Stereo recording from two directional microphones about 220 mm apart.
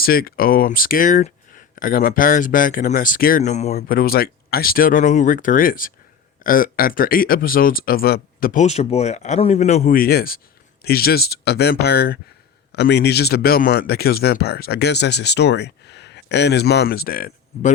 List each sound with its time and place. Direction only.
0.0 s speech: 40° left (ahead or behind)